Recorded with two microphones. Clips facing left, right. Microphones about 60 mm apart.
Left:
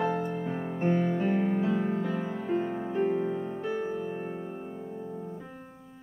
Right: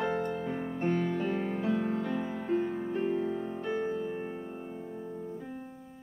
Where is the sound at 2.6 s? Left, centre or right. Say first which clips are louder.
Left 3 dB; centre.